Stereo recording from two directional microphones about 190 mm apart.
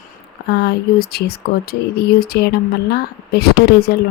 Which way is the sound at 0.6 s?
55° left (ahead or behind).